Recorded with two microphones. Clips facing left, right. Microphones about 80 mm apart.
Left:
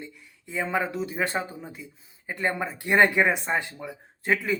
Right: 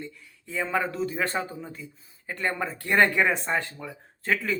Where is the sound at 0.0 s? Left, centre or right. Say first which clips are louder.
Right 2 dB; centre.